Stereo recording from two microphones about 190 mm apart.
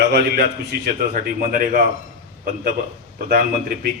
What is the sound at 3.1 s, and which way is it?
Speech, 50° right (ahead or behind).